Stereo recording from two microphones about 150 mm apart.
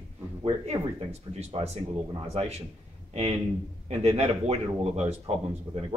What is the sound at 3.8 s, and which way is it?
Speech, 45° right (ahead or behind).